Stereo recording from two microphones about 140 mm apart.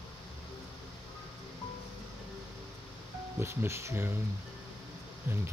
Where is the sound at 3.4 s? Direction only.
20° right (ahead or behind).